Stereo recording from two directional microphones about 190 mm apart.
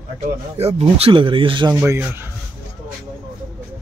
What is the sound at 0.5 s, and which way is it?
Speech, 35° right (ahead or behind).